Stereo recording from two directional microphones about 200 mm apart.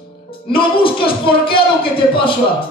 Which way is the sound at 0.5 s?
25° left (ahead or behind).